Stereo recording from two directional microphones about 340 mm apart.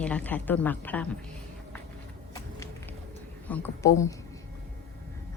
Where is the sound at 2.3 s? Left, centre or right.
Centre.